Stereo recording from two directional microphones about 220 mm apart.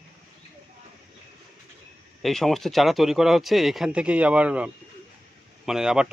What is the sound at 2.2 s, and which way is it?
Speech, centre (ahead or behind).